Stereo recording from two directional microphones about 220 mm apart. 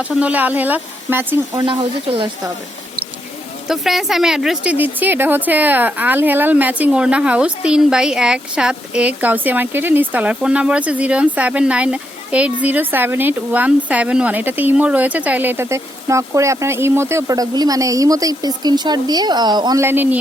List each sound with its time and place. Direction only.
0.0 s a woman's voice: 5° right (ahead or behind)
1.6 s speech: 25° right (ahead or behind)
3.7 s a woman's voice: centre (ahead or behind)